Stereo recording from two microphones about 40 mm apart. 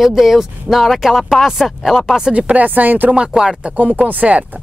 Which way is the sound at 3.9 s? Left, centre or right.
Right.